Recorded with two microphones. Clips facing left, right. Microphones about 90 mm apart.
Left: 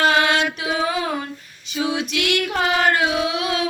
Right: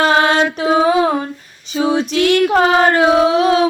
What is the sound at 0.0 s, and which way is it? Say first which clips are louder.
Mantra: right 5 dB; 35° right (ahead or behind).